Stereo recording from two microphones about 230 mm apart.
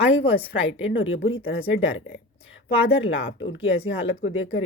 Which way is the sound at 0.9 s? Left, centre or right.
Left.